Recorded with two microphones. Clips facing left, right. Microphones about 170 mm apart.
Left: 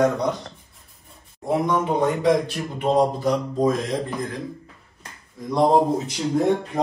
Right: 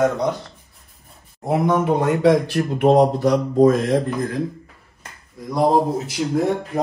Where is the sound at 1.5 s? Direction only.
65° right (ahead or behind).